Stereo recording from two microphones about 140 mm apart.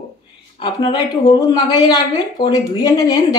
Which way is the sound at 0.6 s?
35° left (ahead or behind).